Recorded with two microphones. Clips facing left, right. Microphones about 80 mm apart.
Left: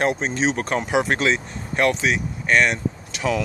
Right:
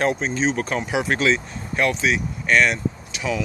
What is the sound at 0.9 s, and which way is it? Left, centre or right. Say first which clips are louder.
Speech: left 3 dB; left.